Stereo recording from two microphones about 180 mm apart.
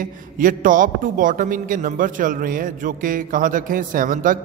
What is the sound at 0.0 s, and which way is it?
A man's voice, 50° right (ahead or behind).